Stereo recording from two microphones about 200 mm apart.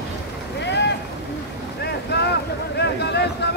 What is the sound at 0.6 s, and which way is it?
Boat, 60° left (ahead or behind).